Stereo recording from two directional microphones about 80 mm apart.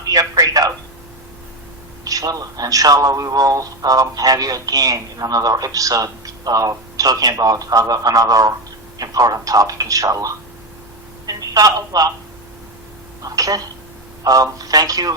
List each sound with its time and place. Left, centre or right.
0.0 s a man's voice: right
2.0 s a man's voice: right
13.2 s a man's voice: right